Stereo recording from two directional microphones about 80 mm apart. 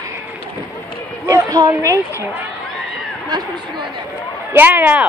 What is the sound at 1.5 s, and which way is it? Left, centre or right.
Speech, right.